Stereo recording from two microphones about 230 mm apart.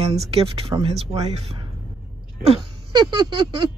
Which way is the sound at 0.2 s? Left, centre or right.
Right.